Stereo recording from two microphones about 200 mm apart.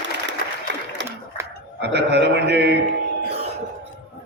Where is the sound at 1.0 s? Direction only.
60° right (ahead or behind).